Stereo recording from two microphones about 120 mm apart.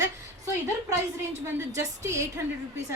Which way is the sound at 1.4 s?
25° right (ahead or behind).